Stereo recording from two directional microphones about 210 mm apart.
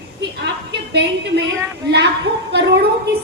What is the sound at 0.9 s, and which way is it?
A woman's voice, 55° right (ahead or behind).